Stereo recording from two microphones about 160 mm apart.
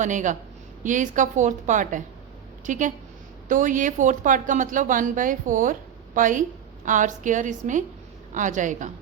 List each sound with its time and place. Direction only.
0.0 s a woman's voice: 50° right (ahead or behind)